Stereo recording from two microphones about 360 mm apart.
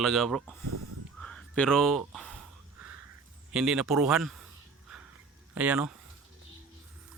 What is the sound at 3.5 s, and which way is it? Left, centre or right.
Speech, centre.